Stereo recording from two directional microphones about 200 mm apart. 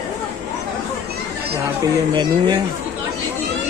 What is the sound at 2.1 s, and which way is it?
Speech, 20° right (ahead or behind).